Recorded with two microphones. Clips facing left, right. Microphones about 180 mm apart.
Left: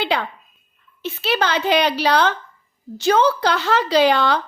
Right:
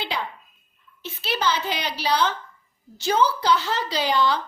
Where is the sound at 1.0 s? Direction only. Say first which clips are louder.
Left 4 dB; 65° left (ahead or behind).